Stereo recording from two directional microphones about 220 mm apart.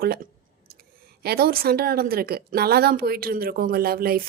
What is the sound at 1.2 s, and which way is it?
A woman's voice, 45° right (ahead or behind).